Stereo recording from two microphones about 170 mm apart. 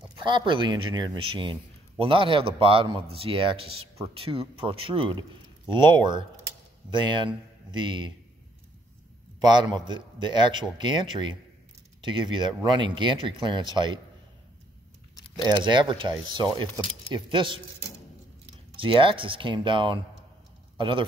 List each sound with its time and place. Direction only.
0.1 s a man's voice: 30° right (ahead or behind)
9.4 s a man's voice: 25° right (ahead or behind)
15.4 s a man's voice: 25° right (ahead or behind)
18.8 s speech: 30° right (ahead or behind)